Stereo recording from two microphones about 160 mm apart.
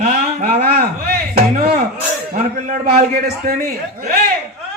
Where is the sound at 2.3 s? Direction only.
65° right (ahead or behind).